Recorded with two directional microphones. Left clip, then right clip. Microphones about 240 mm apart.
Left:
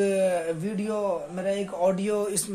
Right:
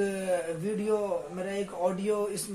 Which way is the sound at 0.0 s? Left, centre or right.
Left.